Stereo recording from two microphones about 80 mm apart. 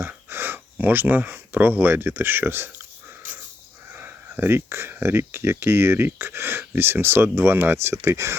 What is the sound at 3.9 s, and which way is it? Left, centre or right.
Speech, right.